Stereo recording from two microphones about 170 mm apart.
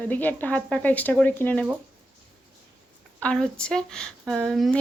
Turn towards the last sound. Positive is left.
turn(degrees=0)  # may be behind; listen again after turning